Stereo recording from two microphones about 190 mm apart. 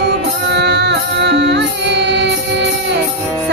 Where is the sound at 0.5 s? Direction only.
65° right (ahead or behind).